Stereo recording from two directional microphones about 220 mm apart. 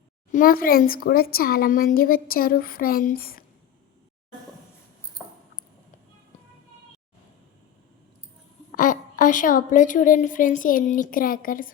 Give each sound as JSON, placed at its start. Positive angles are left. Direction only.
{"t": 0.3, "sound": "speech", "side_deg": 40}
{"t": 8.7, "sound": "a woman's voice", "side_deg": 35}